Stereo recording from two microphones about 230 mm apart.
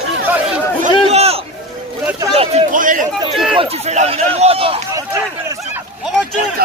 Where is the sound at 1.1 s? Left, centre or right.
Right.